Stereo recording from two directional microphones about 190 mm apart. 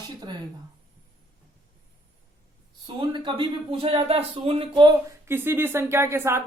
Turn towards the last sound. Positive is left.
turn(degrees=-15)  # may be behind; listen again after turning